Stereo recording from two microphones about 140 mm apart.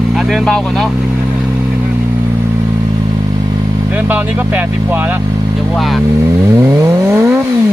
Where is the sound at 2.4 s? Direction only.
20° right (ahead or behind).